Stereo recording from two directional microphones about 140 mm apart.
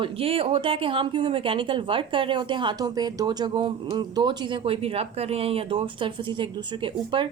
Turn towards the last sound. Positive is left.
turn(degrees=-35)  # may be behind; listen again after turning